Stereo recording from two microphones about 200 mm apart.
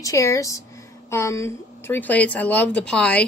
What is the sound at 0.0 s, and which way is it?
Speech, 15° left (ahead or behind).